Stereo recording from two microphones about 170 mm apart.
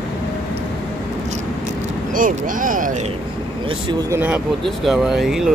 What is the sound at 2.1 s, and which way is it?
Speech, 50° right (ahead or behind).